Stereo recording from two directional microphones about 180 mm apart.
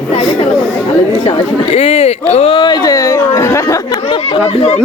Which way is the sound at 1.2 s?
35° left (ahead or behind).